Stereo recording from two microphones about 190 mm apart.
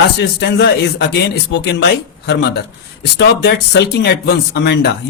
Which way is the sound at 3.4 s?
60° left (ahead or behind).